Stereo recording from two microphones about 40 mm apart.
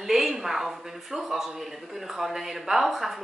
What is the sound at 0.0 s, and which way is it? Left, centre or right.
A man's voice, centre.